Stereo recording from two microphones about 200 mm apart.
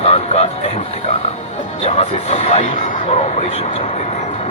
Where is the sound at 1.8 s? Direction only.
30° left (ahead or behind).